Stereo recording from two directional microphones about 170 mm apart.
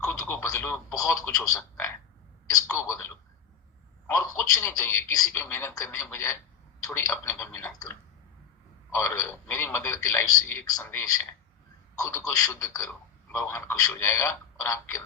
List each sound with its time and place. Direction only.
0.0 s speech: 15° left (ahead or behind)
2.6 s speech: 15° left (ahead or behind)
8.9 s a man's voice: 15° left (ahead or behind)